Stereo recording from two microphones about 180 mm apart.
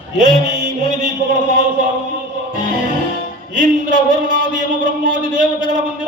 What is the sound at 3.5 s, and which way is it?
A man's voice, 45° right (ahead or behind).